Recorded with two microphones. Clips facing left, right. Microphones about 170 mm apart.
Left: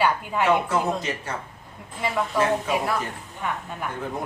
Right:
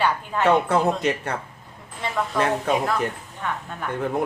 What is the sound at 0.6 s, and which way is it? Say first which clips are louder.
Speech: right 4 dB; 60° right (ahead or behind).